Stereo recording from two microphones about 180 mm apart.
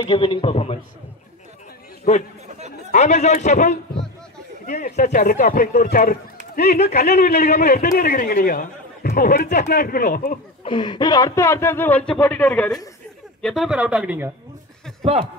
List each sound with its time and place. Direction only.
0.0 s a man's voice: 30° left (ahead or behind)
2.9 s a man's voice: 40° left (ahead or behind); by 7.9 s 60° left (ahead or behind)
7.9 s speech: 50° left (ahead or behind)
10.6 s speech: 25° left (ahead or behind); by 14.3 s 10° right (ahead or behind)